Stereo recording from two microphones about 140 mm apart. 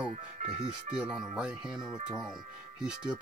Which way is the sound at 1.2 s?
5° right (ahead or behind).